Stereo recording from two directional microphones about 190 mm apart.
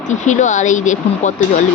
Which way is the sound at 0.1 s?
40° left (ahead or behind).